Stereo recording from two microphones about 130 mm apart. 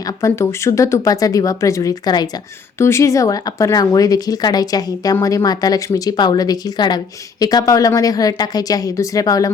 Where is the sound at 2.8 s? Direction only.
20° left (ahead or behind).